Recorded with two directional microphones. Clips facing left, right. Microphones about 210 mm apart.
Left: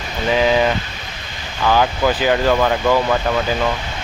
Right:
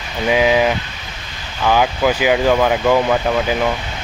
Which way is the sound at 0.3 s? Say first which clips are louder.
Right 1 dB; 10° right (ahead or behind).